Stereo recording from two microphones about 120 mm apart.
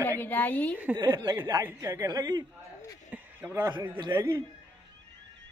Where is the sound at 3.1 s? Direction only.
20° right (ahead or behind).